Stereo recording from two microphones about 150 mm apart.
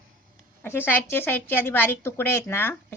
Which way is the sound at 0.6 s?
15° left (ahead or behind).